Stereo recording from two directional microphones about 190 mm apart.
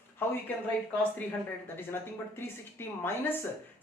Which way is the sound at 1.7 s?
10° left (ahead or behind).